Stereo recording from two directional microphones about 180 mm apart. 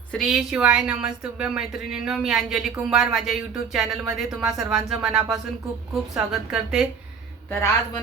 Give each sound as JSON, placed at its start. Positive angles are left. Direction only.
{"t": 0.1, "sound": "a woman's voice", "side_deg": 0}